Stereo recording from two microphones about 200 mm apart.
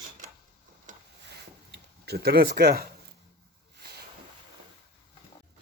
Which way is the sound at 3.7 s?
50° right (ahead or behind).